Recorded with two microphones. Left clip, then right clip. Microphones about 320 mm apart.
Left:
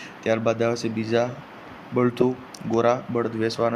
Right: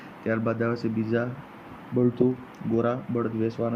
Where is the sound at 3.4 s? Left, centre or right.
Left.